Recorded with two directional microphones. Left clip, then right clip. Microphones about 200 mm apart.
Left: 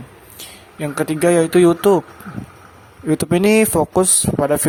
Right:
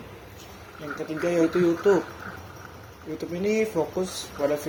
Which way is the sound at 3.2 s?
60° left (ahead or behind).